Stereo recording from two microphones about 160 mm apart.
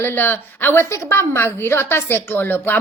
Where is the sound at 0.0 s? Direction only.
15° left (ahead or behind).